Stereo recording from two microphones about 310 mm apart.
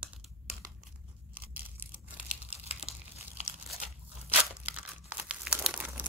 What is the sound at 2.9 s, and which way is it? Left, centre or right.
Crumpling, centre.